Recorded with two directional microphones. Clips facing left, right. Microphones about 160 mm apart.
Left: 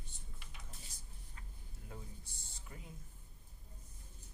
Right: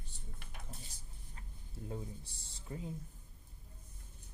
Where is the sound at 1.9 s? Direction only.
30° right (ahead or behind).